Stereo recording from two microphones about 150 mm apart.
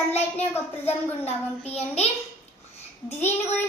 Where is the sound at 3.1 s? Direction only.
15° left (ahead or behind).